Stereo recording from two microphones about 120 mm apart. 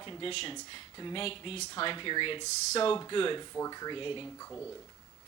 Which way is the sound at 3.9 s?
45° left (ahead or behind).